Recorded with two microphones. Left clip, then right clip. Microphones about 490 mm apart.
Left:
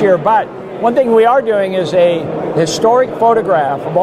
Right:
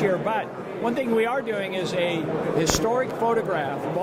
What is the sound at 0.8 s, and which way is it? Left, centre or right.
Speech, left.